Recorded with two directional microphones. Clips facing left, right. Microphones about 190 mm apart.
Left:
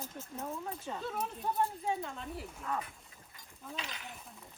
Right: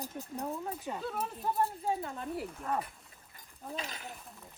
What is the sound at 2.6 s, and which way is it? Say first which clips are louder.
Speech: right 3 dB; 40° right (ahead or behind).